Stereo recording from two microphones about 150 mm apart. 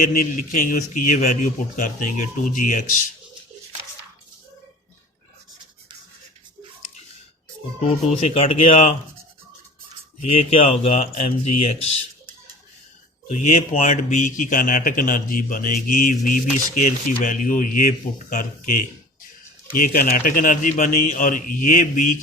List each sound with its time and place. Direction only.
0.0 s speech: 60° left (ahead or behind)
7.9 s speech: 40° left (ahead or behind)
10.2 s speech: 40° left (ahead or behind)
13.2 s speech: 50° left (ahead or behind)